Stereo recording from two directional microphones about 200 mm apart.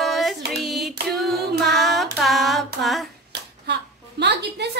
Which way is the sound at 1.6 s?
Centre (ahead or behind).